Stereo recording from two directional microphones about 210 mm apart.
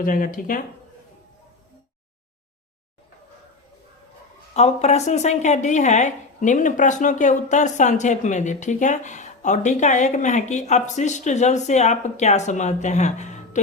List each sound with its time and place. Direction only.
0.0 s a woman's voice: 40° left (ahead or behind)
4.5 s a woman's voice: 30° left (ahead or behind)